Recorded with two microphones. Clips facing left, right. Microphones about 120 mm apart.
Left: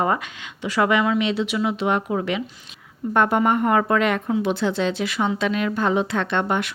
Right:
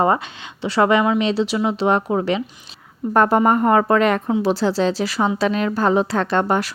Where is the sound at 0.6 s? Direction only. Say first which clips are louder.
Right 3 dB; 30° right (ahead or behind).